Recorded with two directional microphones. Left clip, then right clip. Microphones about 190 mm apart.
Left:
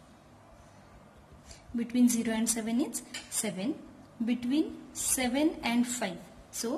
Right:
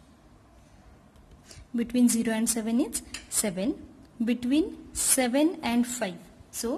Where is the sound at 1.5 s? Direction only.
50° right (ahead or behind).